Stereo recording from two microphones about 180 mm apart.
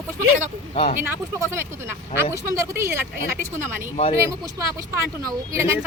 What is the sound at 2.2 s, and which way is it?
Speech, 15° right (ahead or behind).